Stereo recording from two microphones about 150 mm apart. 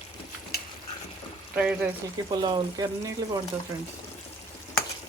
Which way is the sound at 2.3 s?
25° right (ahead or behind).